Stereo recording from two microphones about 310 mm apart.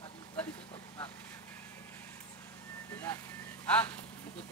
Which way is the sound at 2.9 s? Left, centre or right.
Centre.